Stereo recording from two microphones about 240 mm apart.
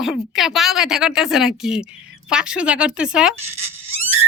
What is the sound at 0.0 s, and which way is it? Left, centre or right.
A woman's voice, centre.